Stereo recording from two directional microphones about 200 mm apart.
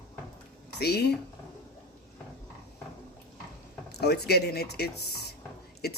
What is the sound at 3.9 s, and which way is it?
Speech, 55° left (ahead or behind).